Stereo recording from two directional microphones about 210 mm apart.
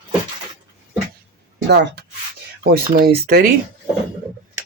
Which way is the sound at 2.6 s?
40° right (ahead or behind).